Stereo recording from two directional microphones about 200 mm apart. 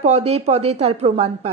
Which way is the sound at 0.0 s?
30° right (ahead or behind).